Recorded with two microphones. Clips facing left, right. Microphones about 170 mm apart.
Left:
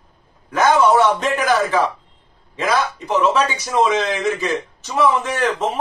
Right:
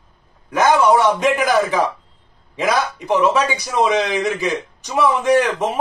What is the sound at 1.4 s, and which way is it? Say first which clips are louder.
Speech: right 1 dB; 15° right (ahead or behind).